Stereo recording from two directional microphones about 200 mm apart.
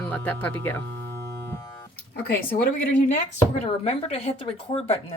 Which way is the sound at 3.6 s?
30° left (ahead or behind).